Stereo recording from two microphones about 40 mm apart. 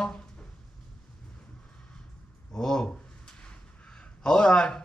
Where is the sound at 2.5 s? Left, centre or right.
Centre.